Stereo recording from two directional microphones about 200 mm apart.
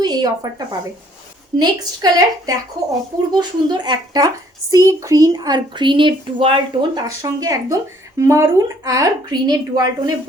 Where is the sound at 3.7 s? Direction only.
20° right (ahead or behind).